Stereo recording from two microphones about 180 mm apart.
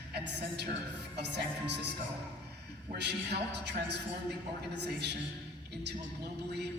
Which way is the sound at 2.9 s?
65° right (ahead or behind).